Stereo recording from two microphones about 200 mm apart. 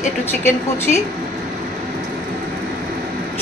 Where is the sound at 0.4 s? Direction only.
10° left (ahead or behind).